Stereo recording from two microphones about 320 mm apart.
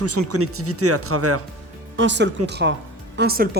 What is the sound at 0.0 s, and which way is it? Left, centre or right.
Speech, right.